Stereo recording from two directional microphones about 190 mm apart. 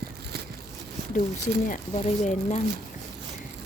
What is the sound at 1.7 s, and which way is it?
Speech, 40° left (ahead or behind).